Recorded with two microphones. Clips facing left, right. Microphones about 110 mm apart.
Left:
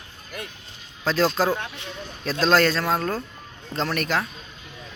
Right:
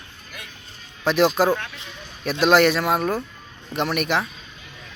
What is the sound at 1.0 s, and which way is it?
Speech, 20° right (ahead or behind).